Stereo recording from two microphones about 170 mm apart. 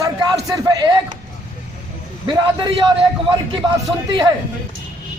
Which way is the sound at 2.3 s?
25° right (ahead or behind).